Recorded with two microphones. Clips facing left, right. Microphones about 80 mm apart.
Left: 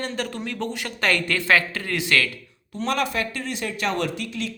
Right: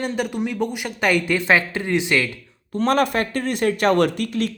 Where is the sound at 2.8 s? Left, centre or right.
Right.